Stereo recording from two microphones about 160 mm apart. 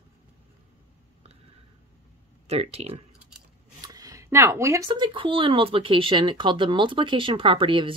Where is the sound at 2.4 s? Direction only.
40° right (ahead or behind).